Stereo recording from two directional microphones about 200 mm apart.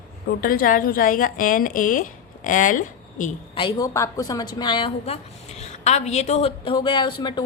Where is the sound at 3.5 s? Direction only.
20° left (ahead or behind).